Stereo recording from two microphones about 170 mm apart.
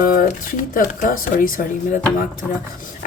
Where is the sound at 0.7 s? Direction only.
55° left (ahead or behind).